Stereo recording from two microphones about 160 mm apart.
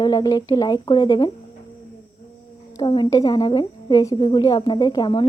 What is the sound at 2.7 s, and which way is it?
A woman's voice, 30° left (ahead or behind).